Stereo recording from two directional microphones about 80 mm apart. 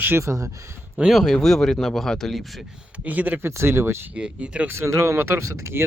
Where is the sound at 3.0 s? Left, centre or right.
Centre.